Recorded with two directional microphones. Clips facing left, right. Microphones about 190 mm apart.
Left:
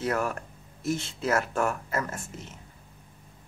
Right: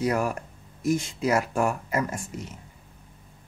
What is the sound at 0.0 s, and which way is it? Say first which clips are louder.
Speech: right 3 dB; 10° right (ahead or behind).